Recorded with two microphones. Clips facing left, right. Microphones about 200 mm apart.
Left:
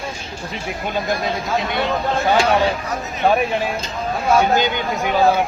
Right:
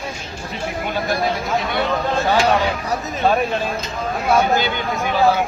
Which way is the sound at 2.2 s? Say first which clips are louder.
Left 1 dB; 15° left (ahead or behind).